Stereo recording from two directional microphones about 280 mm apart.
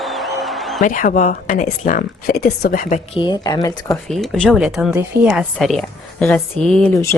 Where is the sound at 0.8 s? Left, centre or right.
Left.